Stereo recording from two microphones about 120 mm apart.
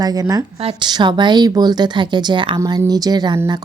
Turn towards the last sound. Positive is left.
turn(degrees=-35)  # may be behind; listen again after turning